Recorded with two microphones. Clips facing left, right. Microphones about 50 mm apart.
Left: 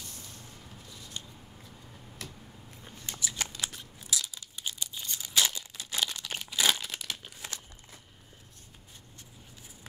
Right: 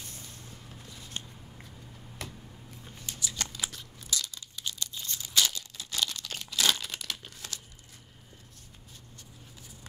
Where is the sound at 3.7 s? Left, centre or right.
Centre.